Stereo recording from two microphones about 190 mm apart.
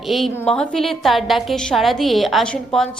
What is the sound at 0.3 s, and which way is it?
A woman's voice, 5° left (ahead or behind).